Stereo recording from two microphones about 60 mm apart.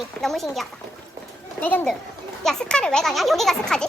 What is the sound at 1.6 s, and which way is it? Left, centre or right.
Speech, left.